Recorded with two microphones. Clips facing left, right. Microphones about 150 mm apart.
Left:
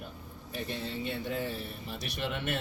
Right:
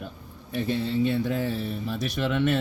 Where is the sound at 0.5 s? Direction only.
90° right.